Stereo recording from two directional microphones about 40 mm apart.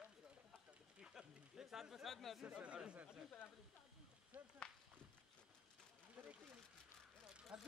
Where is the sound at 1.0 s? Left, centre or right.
Centre.